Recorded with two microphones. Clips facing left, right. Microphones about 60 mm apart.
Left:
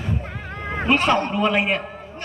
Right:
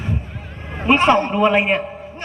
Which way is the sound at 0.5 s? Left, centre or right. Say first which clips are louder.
Left 3 dB; left.